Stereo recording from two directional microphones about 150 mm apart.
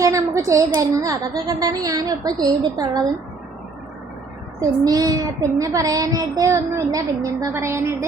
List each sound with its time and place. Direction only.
0.0 s child singing: 20° right (ahead or behind)
4.6 s child singing: 25° right (ahead or behind)